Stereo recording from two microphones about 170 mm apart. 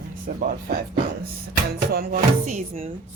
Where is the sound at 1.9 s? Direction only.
60° right (ahead or behind).